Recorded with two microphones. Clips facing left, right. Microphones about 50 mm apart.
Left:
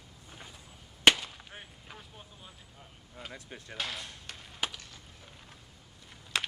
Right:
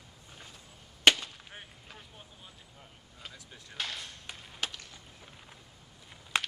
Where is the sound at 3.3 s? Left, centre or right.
Left.